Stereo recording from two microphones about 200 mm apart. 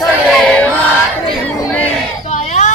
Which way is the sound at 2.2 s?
35° left (ahead or behind).